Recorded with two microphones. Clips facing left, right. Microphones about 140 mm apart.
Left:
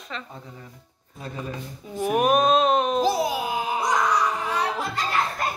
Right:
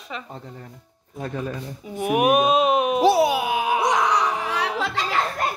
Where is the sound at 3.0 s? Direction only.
70° right (ahead or behind); by 5.2 s 85° right.